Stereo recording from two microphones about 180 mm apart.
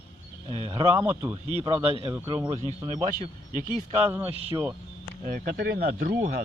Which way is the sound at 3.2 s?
45° right (ahead or behind).